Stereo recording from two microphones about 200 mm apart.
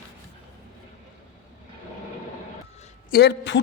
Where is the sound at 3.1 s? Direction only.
60° left (ahead or behind).